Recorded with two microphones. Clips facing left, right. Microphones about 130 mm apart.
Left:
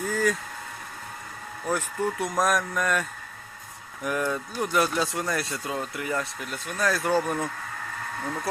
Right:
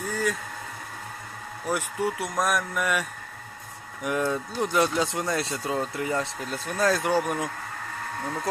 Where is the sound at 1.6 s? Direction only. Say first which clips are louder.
Even; 10° right (ahead or behind).